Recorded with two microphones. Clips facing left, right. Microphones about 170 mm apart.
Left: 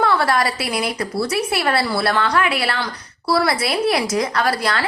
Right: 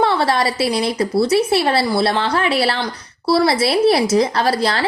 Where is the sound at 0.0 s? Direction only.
25° right (ahead or behind).